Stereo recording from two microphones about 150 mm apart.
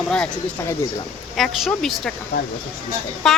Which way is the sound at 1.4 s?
Centre (ahead or behind).